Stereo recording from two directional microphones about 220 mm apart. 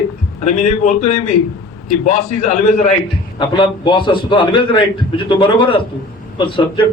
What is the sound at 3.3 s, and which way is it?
A man's voice, 20° left (ahead or behind).